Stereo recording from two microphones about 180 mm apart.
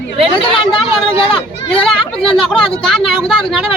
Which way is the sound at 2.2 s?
30° left (ahead or behind).